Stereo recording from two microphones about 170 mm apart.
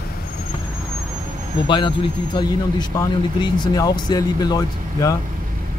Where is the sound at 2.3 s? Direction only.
25° left (ahead or behind).